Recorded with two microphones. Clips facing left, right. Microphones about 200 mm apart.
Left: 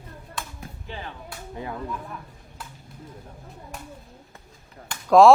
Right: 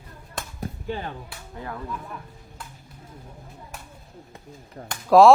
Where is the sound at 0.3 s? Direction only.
45° right (ahead or behind).